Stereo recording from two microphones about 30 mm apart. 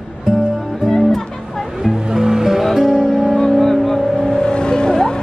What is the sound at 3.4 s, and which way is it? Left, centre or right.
Vehicle, centre.